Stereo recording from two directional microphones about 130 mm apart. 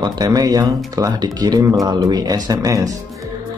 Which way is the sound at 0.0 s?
30° right (ahead or behind).